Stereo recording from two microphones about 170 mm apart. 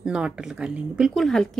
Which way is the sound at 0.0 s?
5° right (ahead or behind).